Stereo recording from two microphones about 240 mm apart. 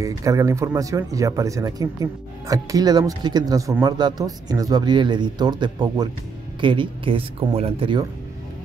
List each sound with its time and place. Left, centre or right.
0.0 s speech: centre